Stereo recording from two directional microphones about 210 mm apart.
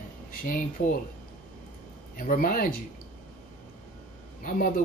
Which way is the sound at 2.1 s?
40° left (ahead or behind).